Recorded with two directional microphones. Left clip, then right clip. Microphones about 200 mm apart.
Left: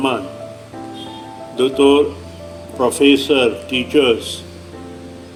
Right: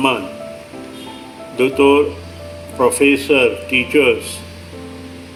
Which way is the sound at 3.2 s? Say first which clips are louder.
Right 1 dB; 60° left (ahead or behind).